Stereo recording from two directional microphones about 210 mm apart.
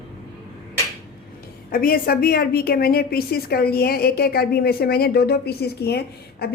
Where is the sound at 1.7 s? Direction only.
45° left (ahead or behind).